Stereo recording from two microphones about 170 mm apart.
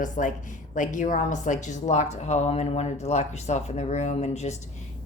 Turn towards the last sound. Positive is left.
turn(degrees=40)  # may be behind; listen again after turning